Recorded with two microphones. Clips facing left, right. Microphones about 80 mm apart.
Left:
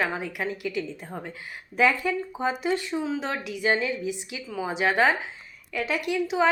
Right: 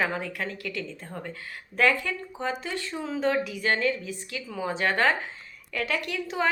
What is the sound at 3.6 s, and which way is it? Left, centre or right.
A woman's voice, centre.